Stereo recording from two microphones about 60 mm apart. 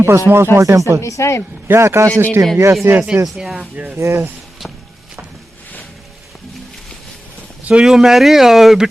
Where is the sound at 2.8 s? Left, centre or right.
Right.